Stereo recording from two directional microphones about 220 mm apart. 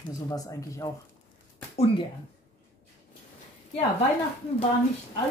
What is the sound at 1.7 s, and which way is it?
Speech, 25° left (ahead or behind).